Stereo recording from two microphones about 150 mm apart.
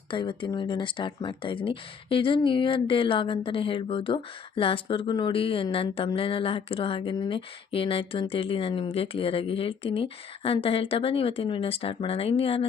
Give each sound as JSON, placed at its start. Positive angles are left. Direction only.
{"t": 0.1, "sound": "speech", "side_deg": 35}